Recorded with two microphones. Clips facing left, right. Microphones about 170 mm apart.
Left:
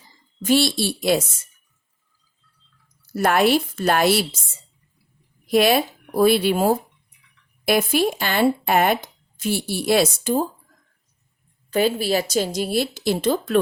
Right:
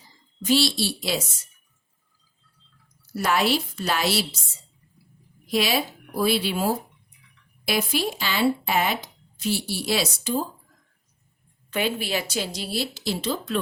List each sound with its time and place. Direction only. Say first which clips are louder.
0.4 s speech: left 3 dB; 50° left (ahead or behind)
3.1 s speech: left 5 dB; 55° left (ahead or behind)
5.5 s speech: left 7 dB; 55° left (ahead or behind)
11.7 s speech: left 6 dB; 40° left (ahead or behind)